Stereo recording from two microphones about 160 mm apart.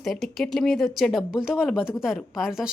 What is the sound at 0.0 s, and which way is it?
Speech, centre (ahead or behind).